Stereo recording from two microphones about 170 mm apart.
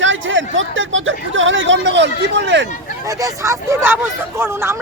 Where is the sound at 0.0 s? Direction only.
90° right.